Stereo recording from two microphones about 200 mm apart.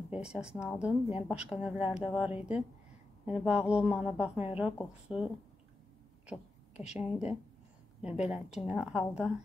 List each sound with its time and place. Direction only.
0.1 s a woman's voice: 5° right (ahead or behind)
6.9 s a woman's voice: 5° right (ahead or behind)